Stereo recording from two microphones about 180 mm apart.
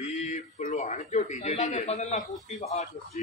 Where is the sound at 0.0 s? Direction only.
40° left (ahead or behind).